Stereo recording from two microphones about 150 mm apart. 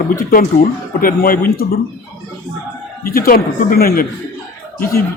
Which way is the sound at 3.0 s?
75° left (ahead or behind).